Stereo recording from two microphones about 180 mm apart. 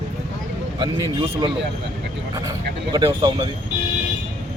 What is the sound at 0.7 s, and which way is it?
A man's voice, 25° right (ahead or behind).